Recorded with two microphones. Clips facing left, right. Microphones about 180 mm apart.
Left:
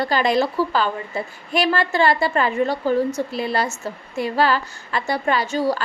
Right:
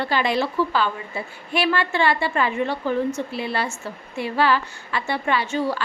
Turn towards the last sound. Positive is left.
turn(degrees=40)  # may be behind; listen again after turning